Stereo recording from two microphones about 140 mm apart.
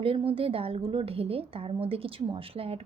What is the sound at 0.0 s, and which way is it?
A woman's voice, 40° right (ahead or behind).